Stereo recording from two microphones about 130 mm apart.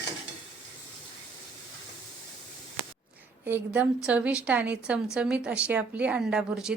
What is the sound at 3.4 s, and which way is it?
A woman's voice, 15° right (ahead or behind).